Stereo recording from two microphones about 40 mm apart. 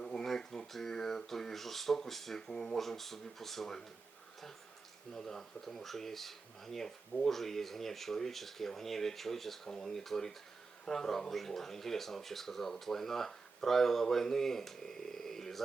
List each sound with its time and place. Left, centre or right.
0.0 s a sound: centre
0.3 s speech: centre
5.1 s speech: centre